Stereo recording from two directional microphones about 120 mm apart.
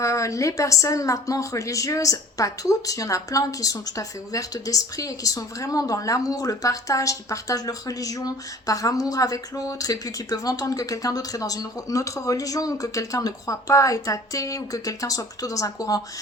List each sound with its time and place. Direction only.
0.0 s a woman's voice: 25° left (ahead or behind)